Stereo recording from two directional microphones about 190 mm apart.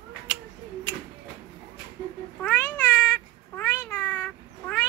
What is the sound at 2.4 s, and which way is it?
Cat, 10° left (ahead or behind).